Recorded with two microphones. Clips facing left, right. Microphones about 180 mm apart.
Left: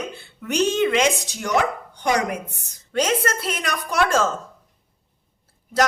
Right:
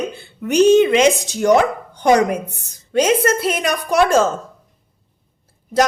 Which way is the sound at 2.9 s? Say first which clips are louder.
Right 7 dB; 15° right (ahead or behind).